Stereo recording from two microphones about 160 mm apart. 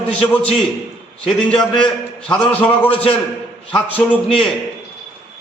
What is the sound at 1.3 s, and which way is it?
A man's voice, 5° left (ahead or behind).